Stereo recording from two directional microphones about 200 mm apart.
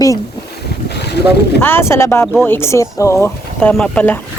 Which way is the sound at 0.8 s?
55° left (ahead or behind).